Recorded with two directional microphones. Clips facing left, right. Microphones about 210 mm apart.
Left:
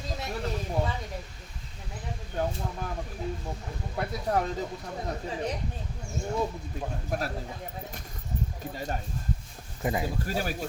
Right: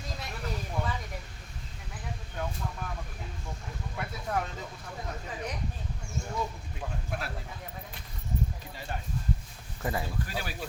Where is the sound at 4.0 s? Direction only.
35° left (ahead or behind).